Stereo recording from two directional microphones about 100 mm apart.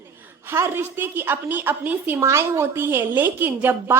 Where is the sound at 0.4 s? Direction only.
25° right (ahead or behind).